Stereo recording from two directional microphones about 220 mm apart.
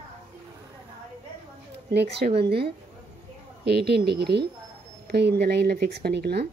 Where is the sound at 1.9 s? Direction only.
50° right (ahead or behind).